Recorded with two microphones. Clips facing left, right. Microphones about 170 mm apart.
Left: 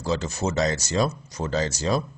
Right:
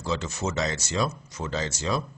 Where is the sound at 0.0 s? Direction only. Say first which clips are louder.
Left 3 dB; 35° left (ahead or behind).